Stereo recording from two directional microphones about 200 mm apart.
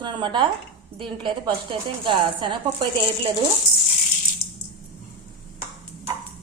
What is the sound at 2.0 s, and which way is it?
Speech, 25° right (ahead or behind).